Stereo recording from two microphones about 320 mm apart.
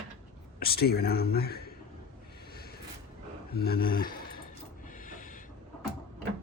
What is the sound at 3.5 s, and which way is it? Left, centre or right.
Speech, left.